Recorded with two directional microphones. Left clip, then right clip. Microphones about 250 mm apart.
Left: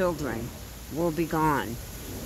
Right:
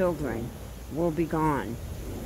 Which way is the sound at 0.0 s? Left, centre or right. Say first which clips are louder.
Even; centre.